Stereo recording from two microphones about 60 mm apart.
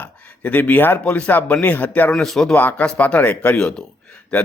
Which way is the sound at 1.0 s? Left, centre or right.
Centre.